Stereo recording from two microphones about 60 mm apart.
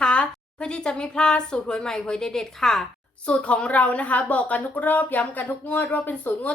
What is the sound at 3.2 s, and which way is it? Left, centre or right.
A woman's voice, centre.